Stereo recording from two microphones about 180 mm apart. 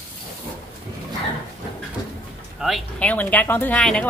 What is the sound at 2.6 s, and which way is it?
Speech, 5° left (ahead or behind).